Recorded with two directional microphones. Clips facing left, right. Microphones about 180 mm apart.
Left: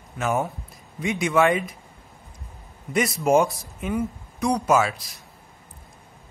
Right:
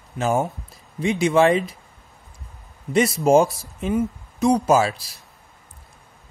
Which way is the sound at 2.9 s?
30° right (ahead or behind).